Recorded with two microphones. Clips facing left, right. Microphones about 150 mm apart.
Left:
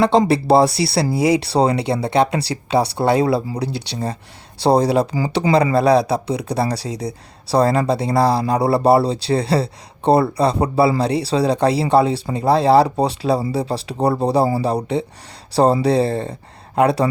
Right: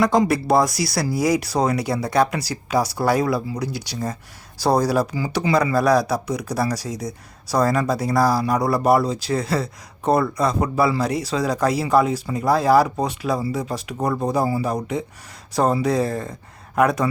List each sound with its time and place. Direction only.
0.0 s speech: 30° left (ahead or behind)